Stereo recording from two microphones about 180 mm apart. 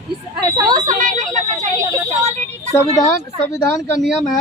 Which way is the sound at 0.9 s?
45° right (ahead or behind).